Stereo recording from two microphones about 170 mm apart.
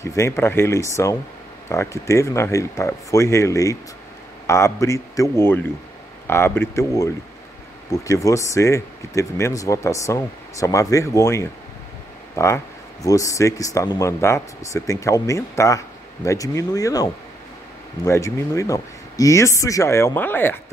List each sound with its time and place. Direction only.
0.0 s speech: 15° left (ahead or behind)